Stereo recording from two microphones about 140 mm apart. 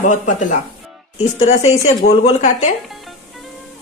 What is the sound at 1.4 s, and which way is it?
Speech, 50° left (ahead or behind).